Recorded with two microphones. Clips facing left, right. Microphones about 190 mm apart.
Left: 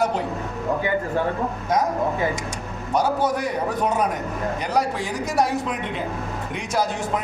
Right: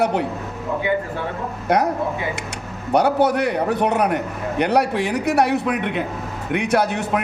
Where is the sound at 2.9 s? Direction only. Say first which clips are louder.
Right 5 dB; 65° right (ahead or behind).